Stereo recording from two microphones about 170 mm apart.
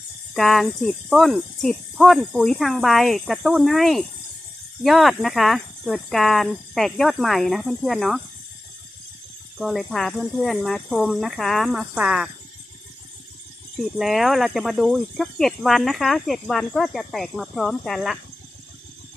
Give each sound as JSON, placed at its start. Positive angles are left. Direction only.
{"t": 0.3, "sound": "speech", "side_deg": 0}
{"t": 9.6, "sound": "speech", "side_deg": 0}
{"t": 14.0, "sound": "speech", "side_deg": 0}